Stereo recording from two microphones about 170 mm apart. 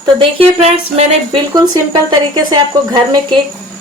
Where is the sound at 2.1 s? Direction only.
25° right (ahead or behind).